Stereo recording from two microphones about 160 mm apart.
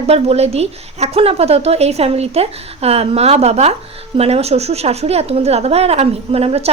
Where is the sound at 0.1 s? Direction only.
40° right (ahead or behind).